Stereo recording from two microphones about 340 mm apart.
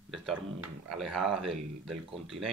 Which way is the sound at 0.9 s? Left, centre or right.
Centre.